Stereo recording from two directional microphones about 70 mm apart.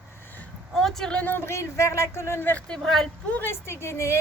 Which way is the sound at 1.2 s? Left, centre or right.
Left.